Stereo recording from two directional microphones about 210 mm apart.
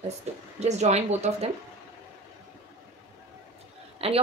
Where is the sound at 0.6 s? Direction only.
30° right (ahead or behind).